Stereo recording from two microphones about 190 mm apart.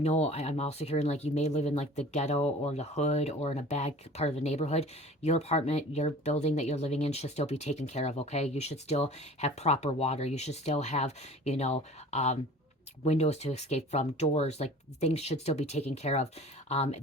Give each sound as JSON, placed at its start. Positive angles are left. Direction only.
{"t": 0.0, "sound": "speech", "side_deg": 35}